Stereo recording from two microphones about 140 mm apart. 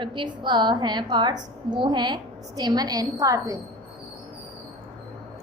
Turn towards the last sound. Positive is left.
turn(degrees=-25)  # may be behind; listen again after turning